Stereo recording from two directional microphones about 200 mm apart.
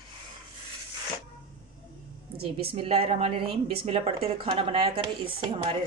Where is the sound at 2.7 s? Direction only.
25° right (ahead or behind).